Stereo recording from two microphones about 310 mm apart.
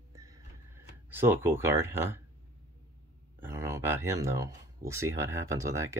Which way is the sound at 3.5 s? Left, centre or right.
Centre.